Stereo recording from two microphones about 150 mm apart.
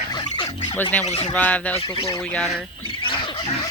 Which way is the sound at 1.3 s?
10° left (ahead or behind).